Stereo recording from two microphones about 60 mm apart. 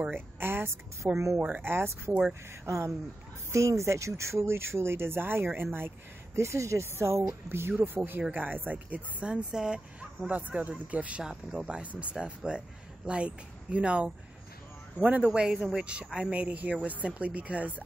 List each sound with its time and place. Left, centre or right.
0.1 s speech: right
1.4 s speech: right
2.6 s speech: right
6.3 s speech: right
9.3 s speech: centre